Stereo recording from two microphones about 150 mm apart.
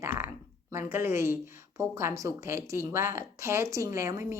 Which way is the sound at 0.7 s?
15° right (ahead or behind).